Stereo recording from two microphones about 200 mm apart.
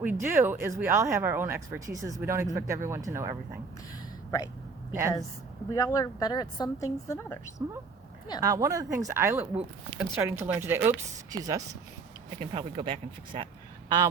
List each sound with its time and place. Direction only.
0.0 s speech: 10° right (ahead or behind)
4.9 s speech: 15° right (ahead or behind)
5.7 s a woman's voice: 15° left (ahead or behind)
8.4 s speech: 15° right (ahead or behind)